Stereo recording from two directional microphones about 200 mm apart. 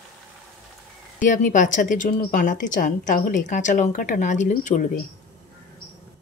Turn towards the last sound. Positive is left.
turn(degrees=40)  # may be behind; listen again after turning